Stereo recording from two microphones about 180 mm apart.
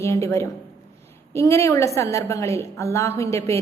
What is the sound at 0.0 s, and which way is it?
A woman's voice, 15° left (ahead or behind).